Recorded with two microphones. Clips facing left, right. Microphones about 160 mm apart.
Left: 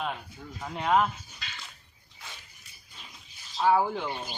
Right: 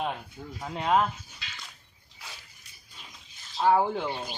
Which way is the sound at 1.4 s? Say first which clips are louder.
Left 2 dB; 45° left (ahead or behind).